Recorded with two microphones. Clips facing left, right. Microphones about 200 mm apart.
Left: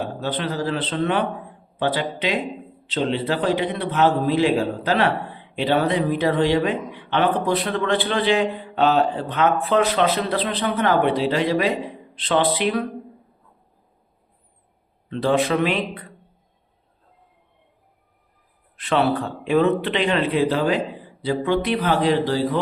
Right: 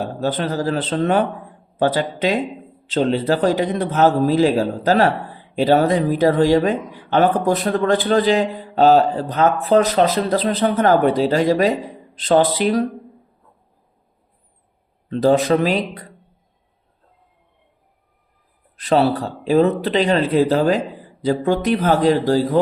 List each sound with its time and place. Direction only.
0.2 s a man's voice: 45° right (ahead or behind)
15.1 s a man's voice: 40° right (ahead or behind)
18.8 s a man's voice: 35° right (ahead or behind)